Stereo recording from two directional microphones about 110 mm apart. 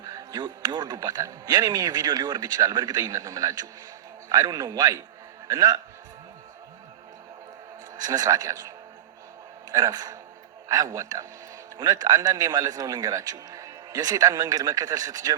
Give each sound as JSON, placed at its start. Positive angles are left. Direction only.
{"t": 0.0, "sound": "speech", "side_deg": -30}
{"t": 7.9, "sound": "speech", "side_deg": -35}